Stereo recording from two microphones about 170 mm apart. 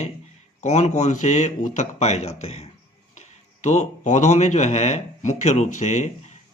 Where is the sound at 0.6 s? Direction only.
40° left (ahead or behind).